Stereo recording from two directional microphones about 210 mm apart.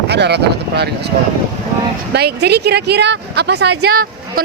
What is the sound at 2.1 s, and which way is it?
A woman's voice, 50° right (ahead or behind).